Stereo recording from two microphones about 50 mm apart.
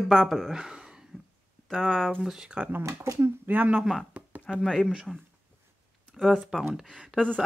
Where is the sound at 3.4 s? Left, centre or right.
Right.